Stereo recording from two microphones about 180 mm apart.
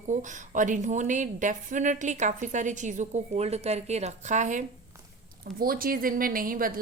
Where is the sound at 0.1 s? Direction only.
45° right (ahead or behind).